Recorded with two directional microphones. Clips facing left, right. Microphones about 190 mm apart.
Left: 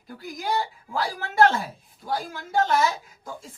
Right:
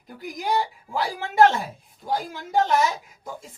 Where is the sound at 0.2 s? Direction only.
15° right (ahead or behind).